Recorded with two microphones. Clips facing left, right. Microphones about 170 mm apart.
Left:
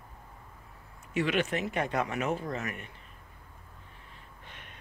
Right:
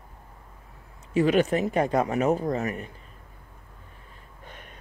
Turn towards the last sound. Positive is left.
turn(degrees=-45)  # may be behind; listen again after turning